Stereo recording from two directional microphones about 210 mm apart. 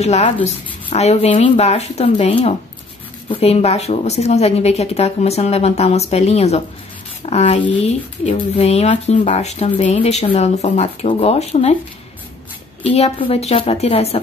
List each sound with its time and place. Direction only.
0.0 s a woman's voice: 30° left (ahead or behind)
12.8 s speech: 30° left (ahead or behind)